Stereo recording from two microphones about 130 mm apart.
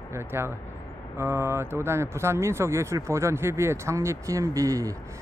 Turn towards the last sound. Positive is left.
turn(degrees=-25)  # may be behind; listen again after turning